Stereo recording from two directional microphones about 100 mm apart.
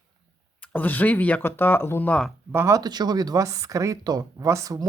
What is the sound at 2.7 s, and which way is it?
Speech, 45° right (ahead or behind).